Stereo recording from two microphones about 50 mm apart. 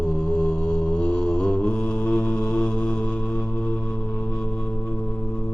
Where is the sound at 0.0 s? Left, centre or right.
Centre.